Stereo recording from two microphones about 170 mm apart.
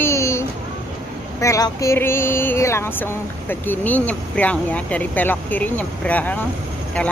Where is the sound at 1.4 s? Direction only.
20° left (ahead or behind).